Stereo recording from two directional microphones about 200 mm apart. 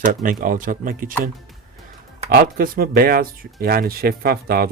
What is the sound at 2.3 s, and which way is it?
Speech, 45° right (ahead or behind).